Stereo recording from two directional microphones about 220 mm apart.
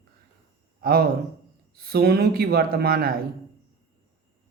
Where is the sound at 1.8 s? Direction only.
45° right (ahead or behind).